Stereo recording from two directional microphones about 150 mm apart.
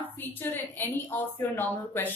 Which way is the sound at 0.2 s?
15° left (ahead or behind).